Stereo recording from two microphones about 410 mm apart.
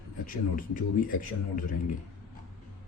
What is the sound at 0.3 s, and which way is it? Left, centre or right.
Speech, centre.